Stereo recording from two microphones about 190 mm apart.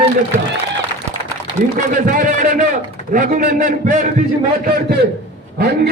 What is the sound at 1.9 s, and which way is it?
A man's voice, 45° right (ahead or behind).